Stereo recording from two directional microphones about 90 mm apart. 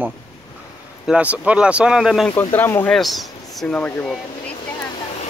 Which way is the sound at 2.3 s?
25° left (ahead or behind).